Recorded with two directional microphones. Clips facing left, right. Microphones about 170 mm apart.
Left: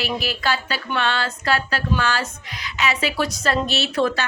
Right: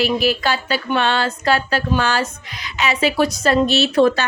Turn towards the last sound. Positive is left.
turn(degrees=-25)  # may be behind; listen again after turning